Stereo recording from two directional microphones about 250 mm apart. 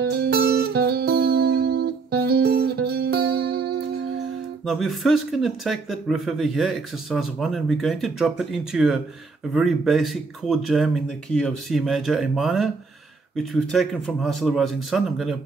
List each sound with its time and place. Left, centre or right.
0.0 s music: right
4.6 s speech: centre